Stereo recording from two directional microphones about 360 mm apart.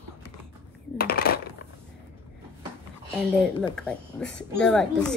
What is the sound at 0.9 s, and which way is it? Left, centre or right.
Coin, left.